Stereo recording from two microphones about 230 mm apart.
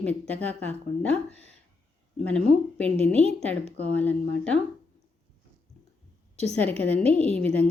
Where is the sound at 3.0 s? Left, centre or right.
Right.